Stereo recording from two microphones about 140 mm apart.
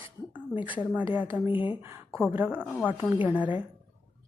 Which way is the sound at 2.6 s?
10° left (ahead or behind).